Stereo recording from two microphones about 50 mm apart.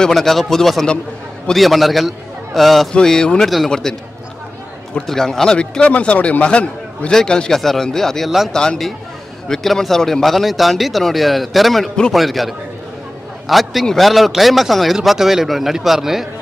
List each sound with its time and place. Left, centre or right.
0.0 s a man's voice: centre
2.9 s speech: centre
5.0 s speech: centre
5.6 s a man's voice: left; by 8.3 s centre
9.5 s speech: centre